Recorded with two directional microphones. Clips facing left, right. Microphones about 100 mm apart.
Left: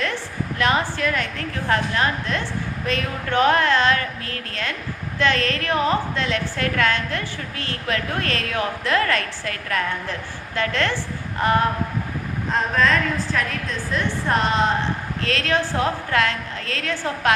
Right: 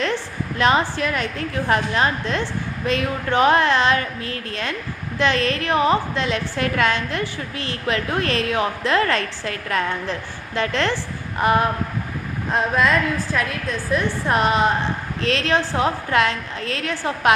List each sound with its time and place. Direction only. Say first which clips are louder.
0.6 s a woman's voice: right 3 dB; 20° right (ahead or behind)